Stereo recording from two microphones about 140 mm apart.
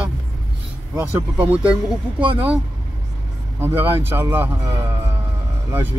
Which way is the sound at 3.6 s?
15° right (ahead or behind).